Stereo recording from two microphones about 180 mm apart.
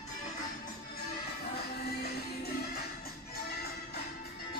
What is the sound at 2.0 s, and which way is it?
Music, 60° left (ahead or behind).